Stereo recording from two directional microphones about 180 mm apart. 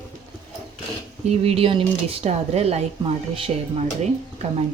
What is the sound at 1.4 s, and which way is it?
Speech, 30° right (ahead or behind).